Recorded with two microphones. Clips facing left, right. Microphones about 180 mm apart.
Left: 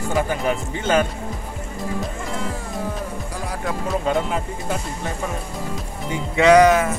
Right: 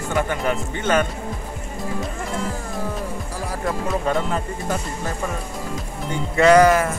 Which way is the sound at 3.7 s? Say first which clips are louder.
Left 1 dB; centre (ahead or behind).